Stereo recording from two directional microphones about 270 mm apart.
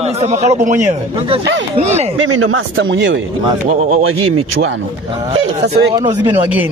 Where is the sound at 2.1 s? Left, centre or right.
Right.